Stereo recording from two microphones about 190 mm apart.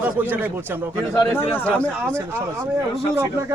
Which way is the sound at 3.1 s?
10° right (ahead or behind).